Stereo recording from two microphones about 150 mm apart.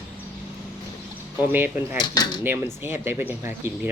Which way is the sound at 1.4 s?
15° right (ahead or behind).